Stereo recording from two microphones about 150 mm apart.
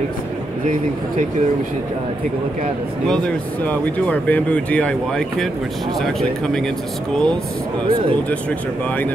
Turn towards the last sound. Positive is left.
turn(degrees=5)  # may be behind; listen again after turning